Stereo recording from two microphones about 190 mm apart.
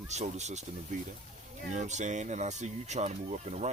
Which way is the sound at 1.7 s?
40° right (ahead or behind).